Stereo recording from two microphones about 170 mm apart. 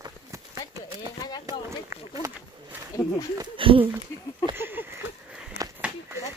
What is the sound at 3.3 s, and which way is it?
Speech, 30° right (ahead or behind).